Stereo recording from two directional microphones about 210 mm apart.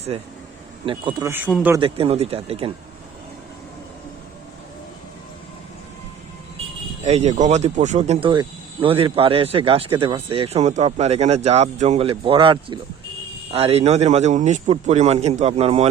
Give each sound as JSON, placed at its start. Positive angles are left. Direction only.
{"t": 0.1, "sound": "speech", "side_deg": -30}
{"t": 1.5, "sound": "speech", "side_deg": 0}
{"t": 1.7, "sound": "speech", "side_deg": -25}
{"t": 7.0, "sound": "a man's voice", "side_deg": -30}